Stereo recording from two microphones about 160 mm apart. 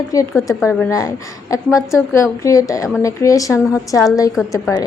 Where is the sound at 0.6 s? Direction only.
5° left (ahead or behind).